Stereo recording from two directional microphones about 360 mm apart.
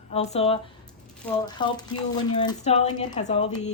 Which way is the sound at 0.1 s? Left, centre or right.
Centre.